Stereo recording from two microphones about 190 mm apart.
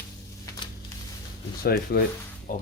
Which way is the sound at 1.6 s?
55° left (ahead or behind).